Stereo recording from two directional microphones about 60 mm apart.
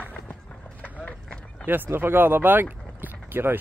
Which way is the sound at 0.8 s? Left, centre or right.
Centre.